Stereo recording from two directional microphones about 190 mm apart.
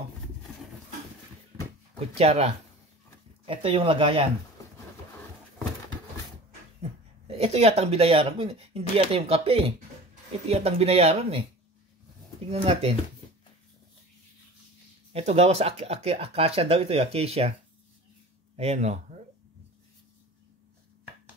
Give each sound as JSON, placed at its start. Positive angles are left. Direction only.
{"t": 2.1, "sound": "speech", "side_deg": -35}
{"t": 6.8, "sound": "speech", "side_deg": -30}
{"t": 12.4, "sound": "speech", "side_deg": -30}
{"t": 15.1, "sound": "speech", "side_deg": -35}
{"t": 18.6, "sound": "speech", "side_deg": -35}